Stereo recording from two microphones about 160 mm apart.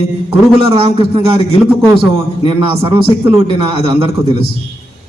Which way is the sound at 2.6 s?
30° right (ahead or behind).